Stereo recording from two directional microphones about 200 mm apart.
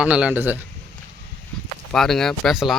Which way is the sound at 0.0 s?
5° right (ahead or behind).